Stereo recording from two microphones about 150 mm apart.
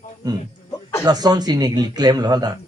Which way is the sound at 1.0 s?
25° right (ahead or behind).